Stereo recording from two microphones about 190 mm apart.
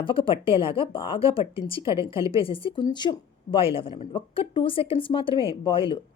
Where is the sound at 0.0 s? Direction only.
25° left (ahead or behind).